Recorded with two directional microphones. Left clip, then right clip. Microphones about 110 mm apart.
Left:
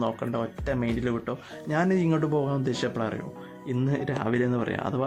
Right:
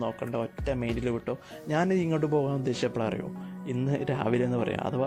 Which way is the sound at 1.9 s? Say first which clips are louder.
Left 1 dB; 75° right (ahead or behind).